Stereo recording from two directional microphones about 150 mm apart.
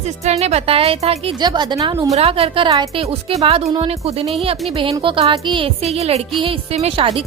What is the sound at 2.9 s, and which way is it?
A woman's voice, 40° right (ahead or behind).